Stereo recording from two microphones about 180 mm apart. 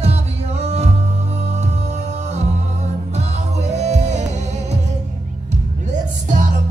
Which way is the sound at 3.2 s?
40° right (ahead or behind).